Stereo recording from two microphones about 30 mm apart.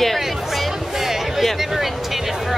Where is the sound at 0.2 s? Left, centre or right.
Centre.